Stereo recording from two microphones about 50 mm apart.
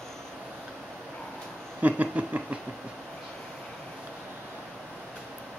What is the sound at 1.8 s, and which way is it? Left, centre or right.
Speech, right.